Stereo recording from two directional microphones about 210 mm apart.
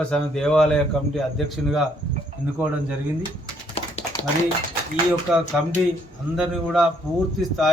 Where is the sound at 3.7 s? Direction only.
30° left (ahead or behind).